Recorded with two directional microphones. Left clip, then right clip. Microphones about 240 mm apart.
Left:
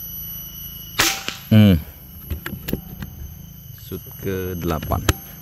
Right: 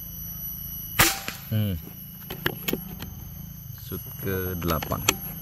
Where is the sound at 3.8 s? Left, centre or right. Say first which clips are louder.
Left 5 dB; centre.